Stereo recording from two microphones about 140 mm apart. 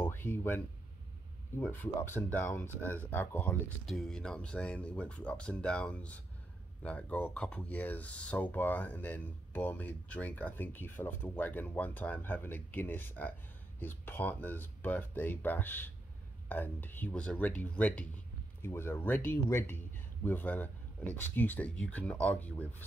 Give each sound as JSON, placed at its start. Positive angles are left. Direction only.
{"t": 0.0, "sound": "music", "side_deg": 15}
{"t": 1.6, "sound": "speech", "side_deg": 15}
{"t": 3.8, "sound": "speech", "side_deg": 5}